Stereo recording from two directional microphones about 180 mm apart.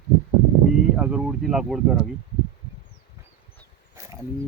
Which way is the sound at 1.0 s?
5° right (ahead or behind).